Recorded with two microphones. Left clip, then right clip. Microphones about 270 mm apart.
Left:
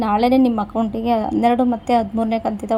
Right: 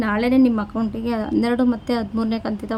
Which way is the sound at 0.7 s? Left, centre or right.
Centre.